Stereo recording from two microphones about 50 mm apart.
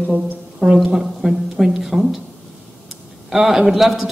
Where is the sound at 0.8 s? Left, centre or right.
Centre.